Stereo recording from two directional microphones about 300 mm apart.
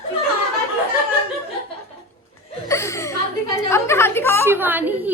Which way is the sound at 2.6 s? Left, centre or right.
Centre.